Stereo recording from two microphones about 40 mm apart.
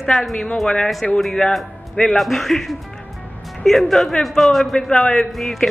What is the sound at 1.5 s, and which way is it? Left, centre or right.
A man's voice, centre.